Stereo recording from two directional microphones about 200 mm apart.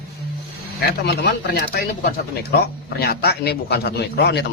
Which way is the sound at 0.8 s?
55° left (ahead or behind).